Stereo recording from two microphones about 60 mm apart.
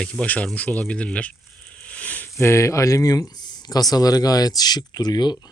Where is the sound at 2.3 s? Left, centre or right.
Left.